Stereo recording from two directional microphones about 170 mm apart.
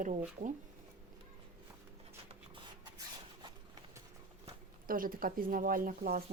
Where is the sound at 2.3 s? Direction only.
25° right (ahead or behind).